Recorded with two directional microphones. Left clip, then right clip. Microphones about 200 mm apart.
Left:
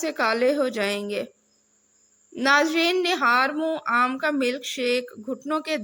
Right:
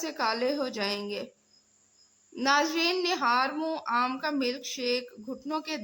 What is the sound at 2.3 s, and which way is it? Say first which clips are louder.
A woman's voice: left 6 dB; 20° left (ahead or behind).